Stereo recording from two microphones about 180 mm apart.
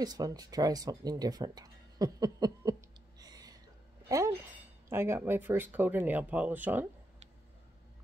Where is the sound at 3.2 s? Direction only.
20° right (ahead or behind).